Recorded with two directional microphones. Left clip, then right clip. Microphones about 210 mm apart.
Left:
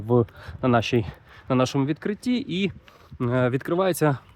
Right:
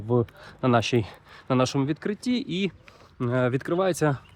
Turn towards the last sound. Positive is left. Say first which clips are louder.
# left 2 dB
turn(degrees=20)  # may be behind; listen again after turning